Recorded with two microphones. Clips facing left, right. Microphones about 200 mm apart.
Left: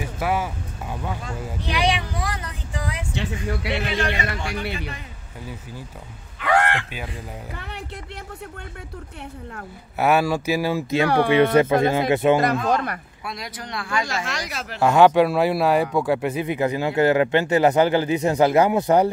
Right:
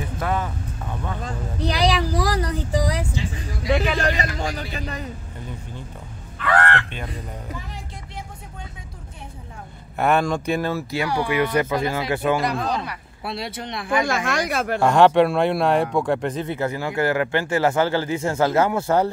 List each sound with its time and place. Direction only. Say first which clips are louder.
0.0 s vehicle: left 1 dB; 10° left (ahead or behind)
1.2 s a sound: right 4 dB; 35° right (ahead or behind)
3.1 s vehicle: left 3 dB; 70° left (ahead or behind)
4.4 s speech: even; 40° right (ahead or behind)
6.4 s speech: even; 15° left (ahead or behind)
7.5 s speech: even; 65° left (ahead or behind)
9.9 s speech: left 1 dB; 5° left (ahead or behind); by 12.4 s 20° left (ahead or behind)
12.6 s speech: left 4 dB; 50° left (ahead or behind)
13.2 s speech: right 4 dB; 30° right (ahead or behind)
14.0 s speech: right 6 dB; 55° right (ahead or behind)
14.8 s speech: left 1 dB; 5° left (ahead or behind)